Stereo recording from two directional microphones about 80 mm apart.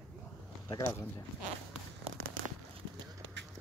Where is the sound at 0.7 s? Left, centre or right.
Left.